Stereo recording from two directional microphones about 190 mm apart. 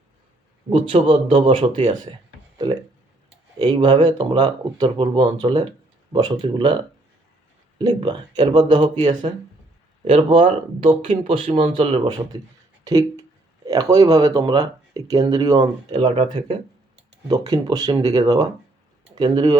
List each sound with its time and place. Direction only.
0.7 s speech: 30° right (ahead or behind)
3.6 s speech: 25° right (ahead or behind)
7.8 s speech: 25° right (ahead or behind)